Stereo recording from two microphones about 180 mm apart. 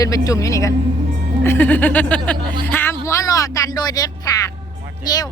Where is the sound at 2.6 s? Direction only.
10° left (ahead or behind).